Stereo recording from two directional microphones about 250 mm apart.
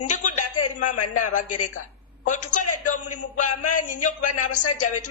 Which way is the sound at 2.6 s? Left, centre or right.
Left.